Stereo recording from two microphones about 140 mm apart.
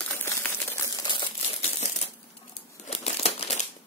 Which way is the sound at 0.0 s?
15° left (ahead or behind).